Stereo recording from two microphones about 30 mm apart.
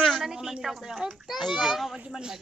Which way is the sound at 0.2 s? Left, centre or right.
Centre.